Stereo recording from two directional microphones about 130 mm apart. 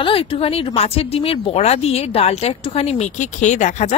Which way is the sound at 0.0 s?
45° left (ahead or behind).